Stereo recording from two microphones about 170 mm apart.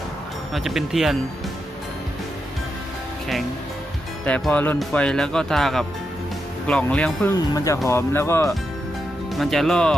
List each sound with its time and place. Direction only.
0.5 s speech: centre (ahead or behind)
4.3 s speech: 5° left (ahead or behind)
7.5 s speech: 20° left (ahead or behind)
9.3 s speech: centre (ahead or behind)